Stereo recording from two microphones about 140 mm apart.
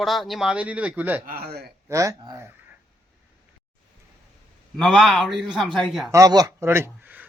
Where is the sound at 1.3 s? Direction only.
90° right.